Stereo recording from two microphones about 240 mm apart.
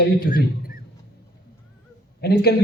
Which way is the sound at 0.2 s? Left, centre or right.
Left.